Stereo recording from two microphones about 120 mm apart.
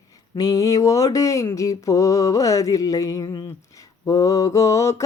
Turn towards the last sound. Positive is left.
turn(degrees=25)  # may be behind; listen again after turning